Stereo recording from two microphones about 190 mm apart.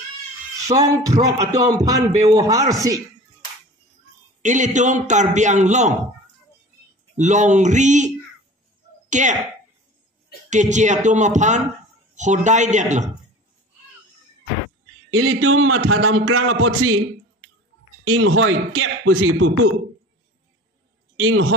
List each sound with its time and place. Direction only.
0.7 s speech: 20° right (ahead or behind)
4.4 s a man's voice: 40° right (ahead or behind)
7.2 s a man's voice: 40° right (ahead or behind)
9.1 s a man's voice: 40° right (ahead or behind)
10.5 s a man's voice: 40° right (ahead or behind)
15.1 s a man's voice: 90° right
18.0 s a man's voice: 90° right
21.2 s a man's voice: 90° right